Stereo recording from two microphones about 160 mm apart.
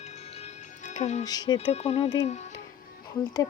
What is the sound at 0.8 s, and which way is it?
Music, 45° left (ahead or behind).